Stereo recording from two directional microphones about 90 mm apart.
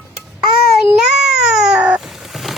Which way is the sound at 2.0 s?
Centre (ahead or behind).